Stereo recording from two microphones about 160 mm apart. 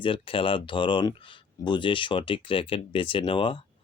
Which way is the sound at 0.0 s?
35° left (ahead or behind).